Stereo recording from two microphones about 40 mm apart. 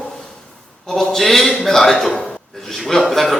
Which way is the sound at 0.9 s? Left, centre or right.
Centre.